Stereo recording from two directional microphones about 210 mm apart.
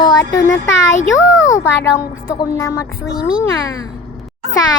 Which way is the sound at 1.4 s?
15° left (ahead or behind).